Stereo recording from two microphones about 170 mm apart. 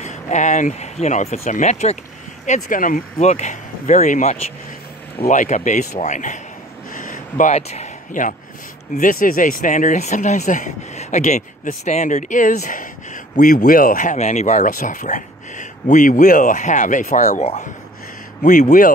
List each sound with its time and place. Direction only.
0.0 s speech: 45° left (ahead or behind)
6.9 s a sound: 50° left (ahead or behind)
8.9 s speech: 55° left (ahead or behind)